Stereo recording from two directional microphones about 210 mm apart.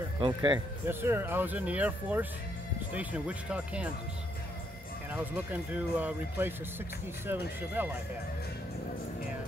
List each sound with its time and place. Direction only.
0.2 s speech: 20° right (ahead or behind)
0.8 s speech: 10° right (ahead or behind)
5.1 s speech: 10° right (ahead or behind)